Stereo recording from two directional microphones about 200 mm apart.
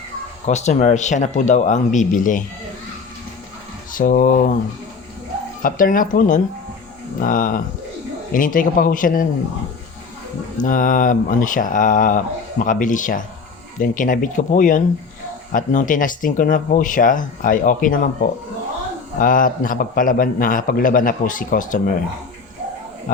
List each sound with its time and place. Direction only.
0.4 s speech: 35° left (ahead or behind)
3.9 s a man's voice: 45° left (ahead or behind)
5.6 s a man's voice: 45° left (ahead or behind)
10.6 s a man's voice: 40° left (ahead or behind)